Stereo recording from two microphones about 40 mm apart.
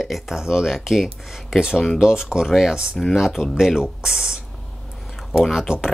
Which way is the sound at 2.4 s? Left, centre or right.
Centre.